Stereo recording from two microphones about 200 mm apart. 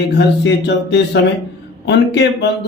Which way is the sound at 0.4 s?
60° left (ahead or behind).